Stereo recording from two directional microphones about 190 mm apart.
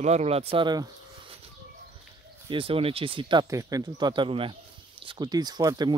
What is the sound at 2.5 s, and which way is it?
Speech, 30° right (ahead or behind).